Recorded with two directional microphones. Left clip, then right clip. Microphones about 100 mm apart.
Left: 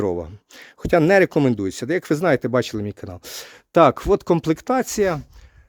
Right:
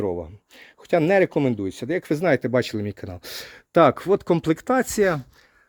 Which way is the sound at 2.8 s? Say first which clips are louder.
Left 1 dB; 20° left (ahead or behind).